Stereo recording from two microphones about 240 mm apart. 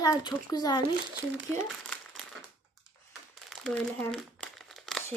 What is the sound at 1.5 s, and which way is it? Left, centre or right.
Crumpling, centre.